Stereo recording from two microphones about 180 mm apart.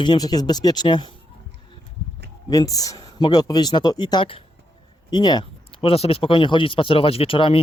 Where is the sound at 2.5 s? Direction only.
20° left (ahead or behind).